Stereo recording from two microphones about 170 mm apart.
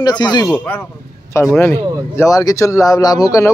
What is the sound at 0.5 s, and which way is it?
Speech, 10° left (ahead or behind).